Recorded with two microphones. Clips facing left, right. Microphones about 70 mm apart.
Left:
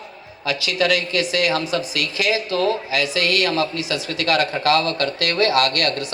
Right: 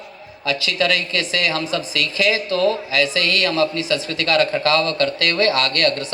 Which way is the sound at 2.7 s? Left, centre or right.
Right.